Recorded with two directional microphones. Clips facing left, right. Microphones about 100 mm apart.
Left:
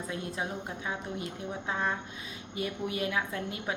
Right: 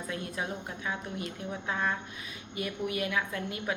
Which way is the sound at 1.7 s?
25° left (ahead or behind).